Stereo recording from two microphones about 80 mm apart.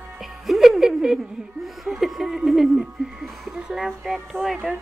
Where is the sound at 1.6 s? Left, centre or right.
Centre.